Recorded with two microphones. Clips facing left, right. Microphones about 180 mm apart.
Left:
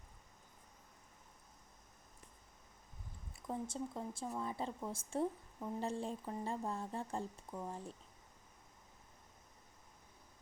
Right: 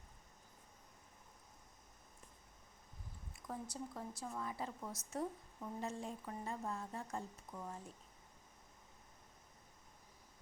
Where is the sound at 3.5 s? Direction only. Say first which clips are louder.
Left 5 dB; 25° left (ahead or behind).